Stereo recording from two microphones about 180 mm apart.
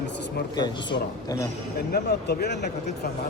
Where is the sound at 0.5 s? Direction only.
25° left (ahead or behind).